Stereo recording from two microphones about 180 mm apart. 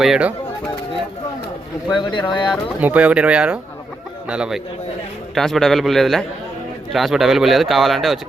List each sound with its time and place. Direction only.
0.0 s speech: 5° right (ahead or behind)
1.9 s speech: 25° left (ahead or behind)
2.5 s speech: 5° right (ahead or behind)